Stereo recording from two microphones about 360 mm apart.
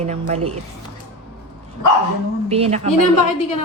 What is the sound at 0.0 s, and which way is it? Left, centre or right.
Speech, centre.